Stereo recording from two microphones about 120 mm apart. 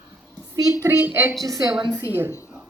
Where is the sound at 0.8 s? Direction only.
15° right (ahead or behind).